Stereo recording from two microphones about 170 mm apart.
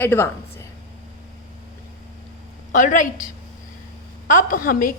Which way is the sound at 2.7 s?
50° left (ahead or behind).